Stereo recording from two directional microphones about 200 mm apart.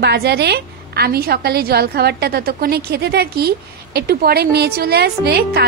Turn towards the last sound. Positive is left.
turn(degrees=-55)  # may be behind; listen again after turning